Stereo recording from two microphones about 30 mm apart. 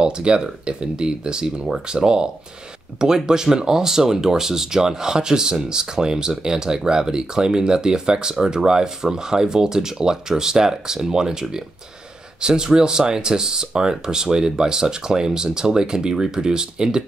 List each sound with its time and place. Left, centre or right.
0.0 s speech: right